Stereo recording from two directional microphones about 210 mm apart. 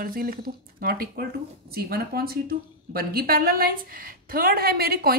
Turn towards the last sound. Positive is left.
turn(degrees=-45)  # may be behind; listen again after turning